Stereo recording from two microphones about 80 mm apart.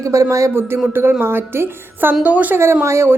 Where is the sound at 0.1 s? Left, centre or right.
Right.